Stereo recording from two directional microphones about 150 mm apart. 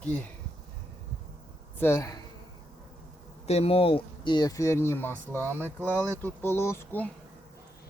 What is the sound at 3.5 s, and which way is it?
Speech, 40° left (ahead or behind).